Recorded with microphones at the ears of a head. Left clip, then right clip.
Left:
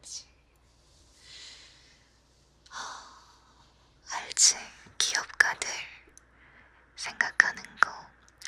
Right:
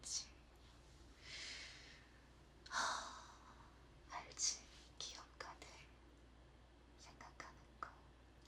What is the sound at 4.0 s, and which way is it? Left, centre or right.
Whispering, left.